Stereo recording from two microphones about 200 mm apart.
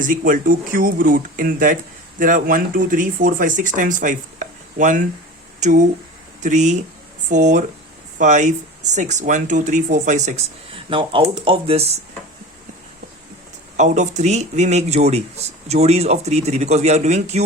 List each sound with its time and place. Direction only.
0.0 s speech: 40° right (ahead or behind)
13.7 s speech: 35° right (ahead or behind)